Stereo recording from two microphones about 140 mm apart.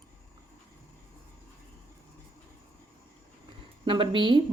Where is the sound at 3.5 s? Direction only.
35° right (ahead or behind).